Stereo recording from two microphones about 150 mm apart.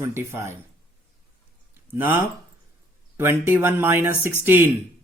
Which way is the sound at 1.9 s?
15° right (ahead or behind).